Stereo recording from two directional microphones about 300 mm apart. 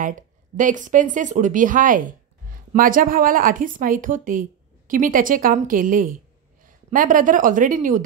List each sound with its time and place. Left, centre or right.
0.0 s a woman's voice: right